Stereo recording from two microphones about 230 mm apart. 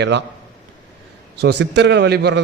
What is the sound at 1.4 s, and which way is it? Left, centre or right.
A man's voice, right.